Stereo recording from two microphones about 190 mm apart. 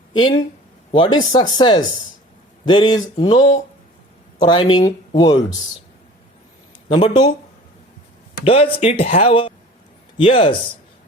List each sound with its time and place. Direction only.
0.1 s speech: 25° left (ahead or behind)
3.3 s speech: 40° left (ahead or behind)
4.4 s speech: 25° left (ahead or behind)
6.8 s speech: 30° left (ahead or behind)
8.4 s speech: 30° left (ahead or behind)